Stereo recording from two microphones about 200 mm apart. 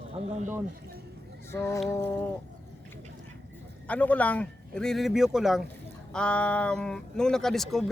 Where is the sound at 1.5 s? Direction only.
15° left (ahead or behind).